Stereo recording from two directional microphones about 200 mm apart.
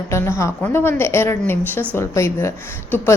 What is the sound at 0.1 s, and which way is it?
A woman's voice, 15° left (ahead or behind).